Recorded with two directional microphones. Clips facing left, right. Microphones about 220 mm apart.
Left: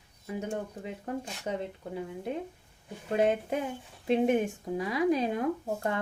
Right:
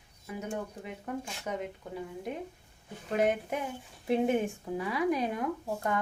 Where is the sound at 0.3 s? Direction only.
30° left (ahead or behind).